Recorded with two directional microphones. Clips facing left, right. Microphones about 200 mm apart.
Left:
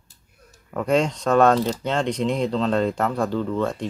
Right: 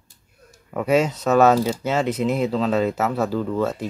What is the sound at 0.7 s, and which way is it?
Speech, 5° right (ahead or behind).